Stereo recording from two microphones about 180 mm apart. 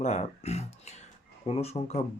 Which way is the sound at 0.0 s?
40° left (ahead or behind).